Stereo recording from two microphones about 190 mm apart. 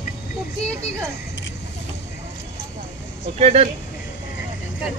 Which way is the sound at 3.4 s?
35° right (ahead or behind).